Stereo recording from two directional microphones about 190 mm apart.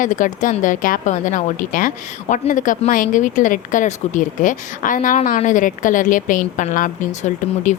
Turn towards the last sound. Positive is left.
turn(degrees=40)  # may be behind; listen again after turning